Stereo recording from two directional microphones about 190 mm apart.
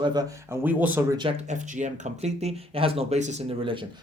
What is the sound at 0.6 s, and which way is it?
Speech, 10° right (ahead or behind).